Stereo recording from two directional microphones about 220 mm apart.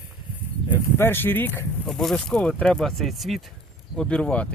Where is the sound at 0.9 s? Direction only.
10° left (ahead or behind).